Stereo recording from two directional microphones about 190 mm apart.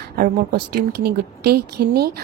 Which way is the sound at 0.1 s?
50° right (ahead or behind).